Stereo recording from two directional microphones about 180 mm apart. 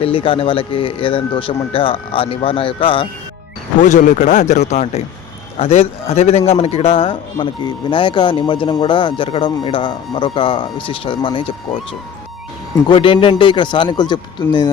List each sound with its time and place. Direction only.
0.0 s a man's voice: 30° left (ahead or behind)
3.8 s a man's voice: 45° left (ahead or behind); by 11.5 s 30° left (ahead or behind)
12.9 s a man's voice: 30° left (ahead or behind)